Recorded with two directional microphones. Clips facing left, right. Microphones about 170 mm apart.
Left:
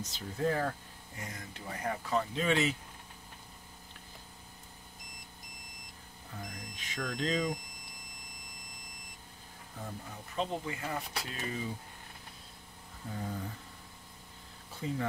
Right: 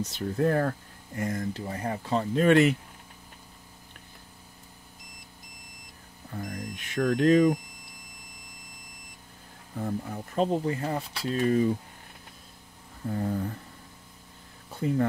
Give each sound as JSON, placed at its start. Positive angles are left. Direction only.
{"t": 0.1, "sound": "speech", "side_deg": -60}
{"t": 1.5, "sound": "speech", "side_deg": -30}
{"t": 2.3, "sound": "speech", "side_deg": -60}
{"t": 6.4, "sound": "speech", "side_deg": -55}
{"t": 9.8, "sound": "speech", "side_deg": -55}
{"t": 11.4, "sound": "speech", "side_deg": -55}
{"t": 13.1, "sound": "speech", "side_deg": -50}
{"t": 14.8, "sound": "speech", "side_deg": -55}